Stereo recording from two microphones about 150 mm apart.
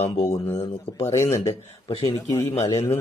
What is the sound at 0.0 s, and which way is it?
Speech, 45° left (ahead or behind).